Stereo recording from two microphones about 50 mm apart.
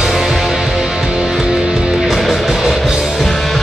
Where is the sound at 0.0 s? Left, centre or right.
Centre.